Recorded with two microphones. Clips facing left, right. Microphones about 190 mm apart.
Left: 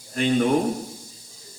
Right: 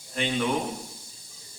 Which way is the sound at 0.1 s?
45° left (ahead or behind).